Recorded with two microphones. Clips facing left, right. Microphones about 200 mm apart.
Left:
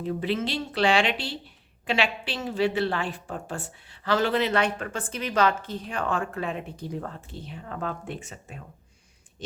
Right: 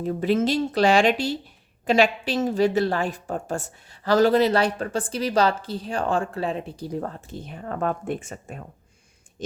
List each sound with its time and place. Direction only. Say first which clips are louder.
0.0 s a woman's voice: right 6 dB; 45° right (ahead or behind)